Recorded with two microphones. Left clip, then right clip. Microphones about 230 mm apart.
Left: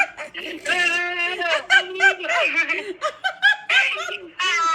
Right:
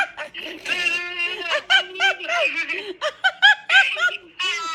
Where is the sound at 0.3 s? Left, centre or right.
Centre.